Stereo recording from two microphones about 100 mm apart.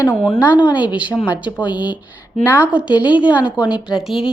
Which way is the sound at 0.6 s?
15° right (ahead or behind).